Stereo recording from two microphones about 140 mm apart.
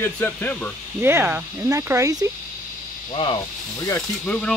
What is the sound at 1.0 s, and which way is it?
Speech, 15° right (ahead or behind).